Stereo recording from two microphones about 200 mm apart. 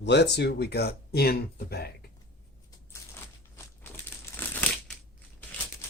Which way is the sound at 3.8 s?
10° left (ahead or behind).